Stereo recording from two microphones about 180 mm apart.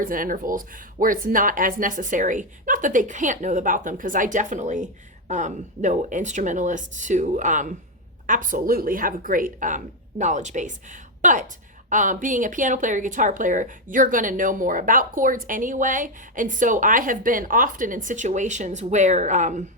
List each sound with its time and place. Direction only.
0.0 s speech: 50° right (ahead or behind)